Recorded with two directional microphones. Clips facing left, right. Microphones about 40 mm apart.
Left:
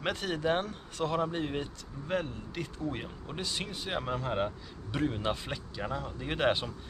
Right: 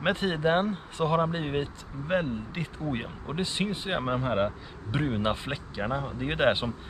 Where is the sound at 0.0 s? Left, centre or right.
Right.